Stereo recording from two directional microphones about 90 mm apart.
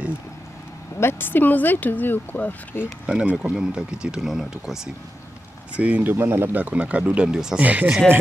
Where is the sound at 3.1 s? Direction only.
10° right (ahead or behind).